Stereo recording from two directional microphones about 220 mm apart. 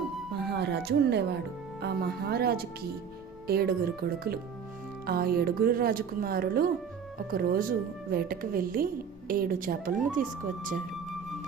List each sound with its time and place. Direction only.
0.3 s a woman's voice: 50° right (ahead or behind)